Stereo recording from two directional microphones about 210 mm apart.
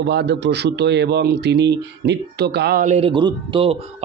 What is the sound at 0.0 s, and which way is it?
A man's voice, 55° right (ahead or behind).